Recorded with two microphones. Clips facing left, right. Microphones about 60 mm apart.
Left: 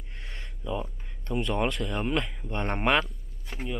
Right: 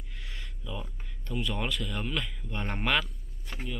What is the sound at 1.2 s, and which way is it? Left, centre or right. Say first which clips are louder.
Speech: left 6 dB; left.